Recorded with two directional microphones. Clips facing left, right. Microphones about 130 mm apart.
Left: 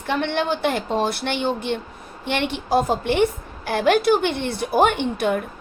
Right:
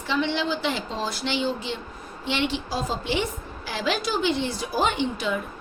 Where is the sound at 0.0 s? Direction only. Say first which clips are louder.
Left 3 dB; 60° left (ahead or behind).